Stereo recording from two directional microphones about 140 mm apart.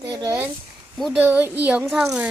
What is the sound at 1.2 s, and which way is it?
Speech, 15° right (ahead or behind).